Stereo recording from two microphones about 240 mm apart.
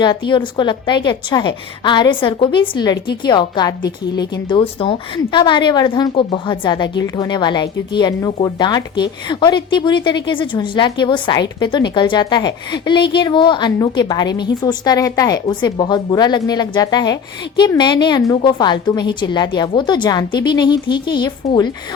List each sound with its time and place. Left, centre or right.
0.0 s a woman's voice: centre